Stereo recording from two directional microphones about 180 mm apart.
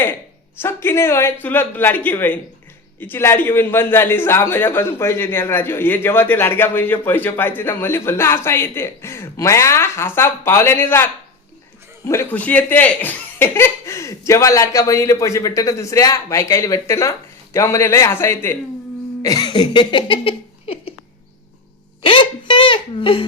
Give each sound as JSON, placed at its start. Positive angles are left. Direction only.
{"t": 0.6, "sound": "a man's voice", "side_deg": 10}
{"t": 19.2, "sound": "a sound", "side_deg": 20}
{"t": 22.0, "sound": "speech", "side_deg": 30}